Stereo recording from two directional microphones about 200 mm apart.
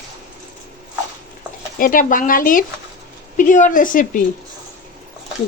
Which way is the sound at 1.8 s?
45° left (ahead or behind).